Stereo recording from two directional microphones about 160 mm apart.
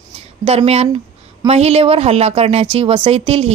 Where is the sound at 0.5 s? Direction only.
40° right (ahead or behind).